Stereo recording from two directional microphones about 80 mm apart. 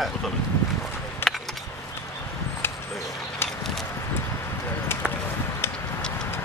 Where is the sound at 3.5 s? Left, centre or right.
Centre.